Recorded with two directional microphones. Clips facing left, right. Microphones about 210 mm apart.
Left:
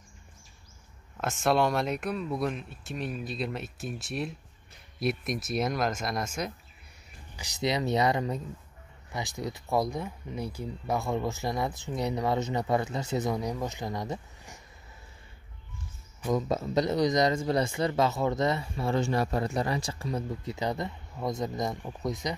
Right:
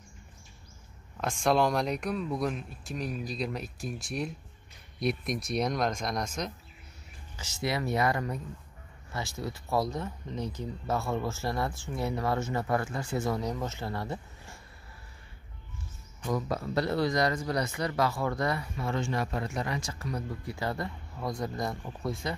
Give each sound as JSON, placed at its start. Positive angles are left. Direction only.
{"t": 1.1, "sound": "speech", "side_deg": 5}
{"t": 16.3, "sound": "speech", "side_deg": 20}